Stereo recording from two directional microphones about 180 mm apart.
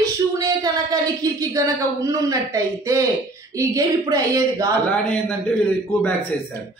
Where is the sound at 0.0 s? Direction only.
20° right (ahead or behind).